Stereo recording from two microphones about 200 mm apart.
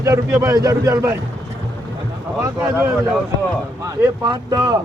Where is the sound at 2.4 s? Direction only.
10° right (ahead or behind).